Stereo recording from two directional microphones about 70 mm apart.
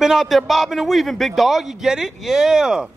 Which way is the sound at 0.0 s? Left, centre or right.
Centre.